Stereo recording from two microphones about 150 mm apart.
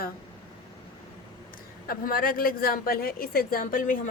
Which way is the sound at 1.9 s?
70° left (ahead or behind).